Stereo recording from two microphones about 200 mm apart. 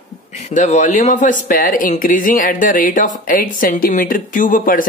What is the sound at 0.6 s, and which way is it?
Speech, 35° left (ahead or behind).